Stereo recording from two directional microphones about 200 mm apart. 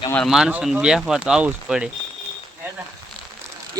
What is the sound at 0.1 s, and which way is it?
Speech, centre (ahead or behind).